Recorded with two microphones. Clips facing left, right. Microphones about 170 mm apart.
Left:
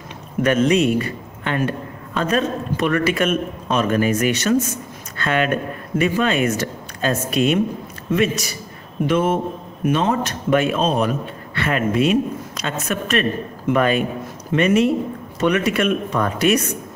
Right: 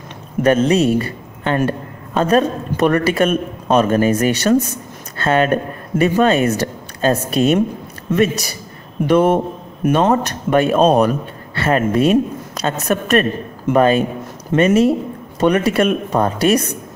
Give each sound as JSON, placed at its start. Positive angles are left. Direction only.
{"t": 0.4, "sound": "a man's voice", "side_deg": -35}
{"t": 9.8, "sound": "a man's voice", "side_deg": -45}